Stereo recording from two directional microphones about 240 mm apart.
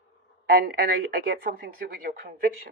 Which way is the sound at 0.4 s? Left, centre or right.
Right.